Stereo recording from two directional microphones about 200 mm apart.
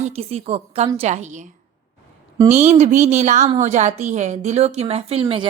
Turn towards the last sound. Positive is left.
turn(degrees=-30)  # may be behind; listen again after turning